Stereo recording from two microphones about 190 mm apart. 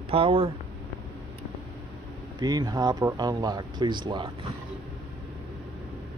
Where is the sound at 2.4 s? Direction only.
20° right (ahead or behind).